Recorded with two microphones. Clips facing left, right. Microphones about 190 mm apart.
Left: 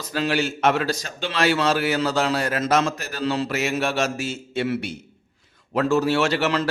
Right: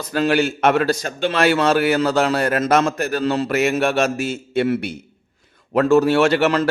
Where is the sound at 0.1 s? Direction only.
55° right (ahead or behind).